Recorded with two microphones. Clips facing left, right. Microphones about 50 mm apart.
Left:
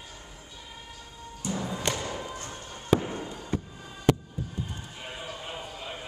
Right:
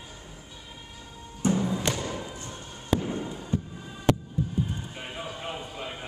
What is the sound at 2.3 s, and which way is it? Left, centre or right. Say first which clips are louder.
Music: left 1 dB; left.